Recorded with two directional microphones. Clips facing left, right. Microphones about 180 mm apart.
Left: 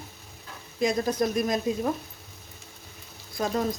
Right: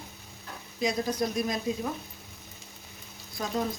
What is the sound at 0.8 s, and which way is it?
Speech, 50° left (ahead or behind).